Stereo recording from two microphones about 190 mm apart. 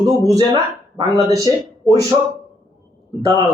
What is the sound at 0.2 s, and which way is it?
Speech, 15° right (ahead or behind).